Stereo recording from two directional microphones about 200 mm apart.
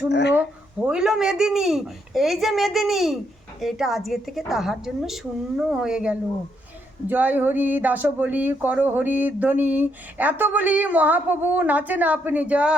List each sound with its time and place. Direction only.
0.1 s speech: 60° left (ahead or behind)
0.9 s a woman's voice: 5° right (ahead or behind)